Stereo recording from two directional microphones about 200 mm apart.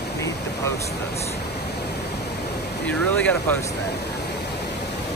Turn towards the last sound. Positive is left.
turn(degrees=5)  # may be behind; listen again after turning